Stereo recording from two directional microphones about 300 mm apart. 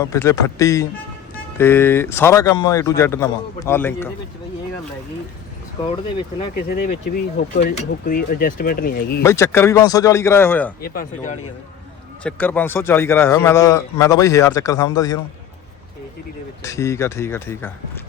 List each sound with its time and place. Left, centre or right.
0.0 s a man's voice: centre
6.7 s speech: left
7.5 s speech: left
9.2 s a man's voice: centre
10.9 s speech: left
12.2 s a man's voice: centre
16.6 s a man's voice: centre